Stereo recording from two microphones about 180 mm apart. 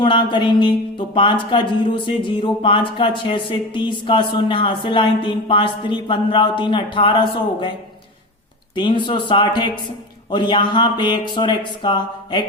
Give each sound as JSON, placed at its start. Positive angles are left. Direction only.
{"t": 0.0, "sound": "speech", "side_deg": 25}
{"t": 8.7, "sound": "speech", "side_deg": 25}